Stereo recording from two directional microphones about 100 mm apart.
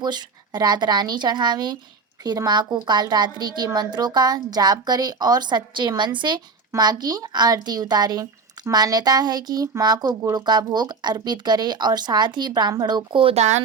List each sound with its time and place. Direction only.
0.0 s a woman's voice: 45° right (ahead or behind); by 13.7 s 80° right